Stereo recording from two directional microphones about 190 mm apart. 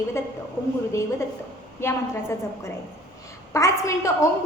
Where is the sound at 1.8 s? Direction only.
10° left (ahead or behind).